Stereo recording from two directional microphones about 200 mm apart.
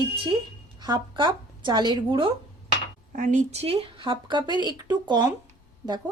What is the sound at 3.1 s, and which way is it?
Speech, 40° right (ahead or behind).